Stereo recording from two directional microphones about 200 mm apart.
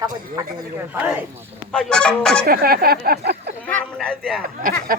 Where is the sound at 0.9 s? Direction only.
10° right (ahead or behind).